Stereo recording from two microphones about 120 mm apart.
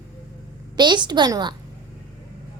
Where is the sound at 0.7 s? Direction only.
40° right (ahead or behind).